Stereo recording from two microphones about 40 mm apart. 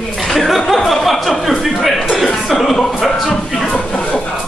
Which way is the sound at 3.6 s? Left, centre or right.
Left.